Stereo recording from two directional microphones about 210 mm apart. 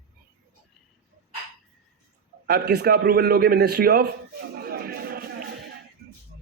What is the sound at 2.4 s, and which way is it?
A man's voice, 50° right (ahead or behind).